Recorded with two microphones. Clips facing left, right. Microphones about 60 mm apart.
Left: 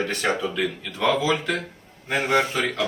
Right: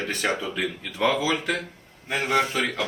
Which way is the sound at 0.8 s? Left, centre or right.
Centre.